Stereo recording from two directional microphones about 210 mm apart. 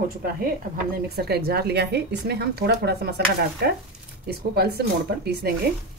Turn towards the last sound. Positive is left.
turn(degrees=-50)  # may be behind; listen again after turning